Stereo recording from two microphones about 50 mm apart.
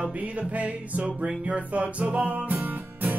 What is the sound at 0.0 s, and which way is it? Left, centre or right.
Music, right.